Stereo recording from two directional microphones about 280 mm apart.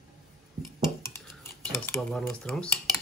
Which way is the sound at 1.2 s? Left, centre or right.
Centre.